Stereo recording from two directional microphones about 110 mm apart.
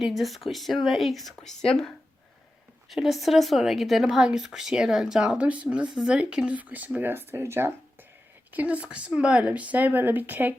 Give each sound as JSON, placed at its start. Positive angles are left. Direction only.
{"t": 0.0, "sound": "a woman's voice", "side_deg": 0}
{"t": 2.9, "sound": "a woman's voice", "side_deg": 0}